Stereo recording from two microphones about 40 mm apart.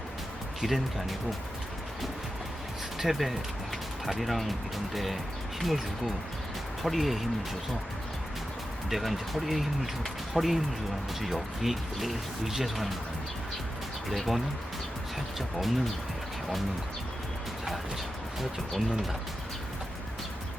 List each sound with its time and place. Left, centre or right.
0.6 s speech: centre
3.0 s speech: centre
6.8 s speech: centre
8.9 s speech: centre
14.1 s speech: centre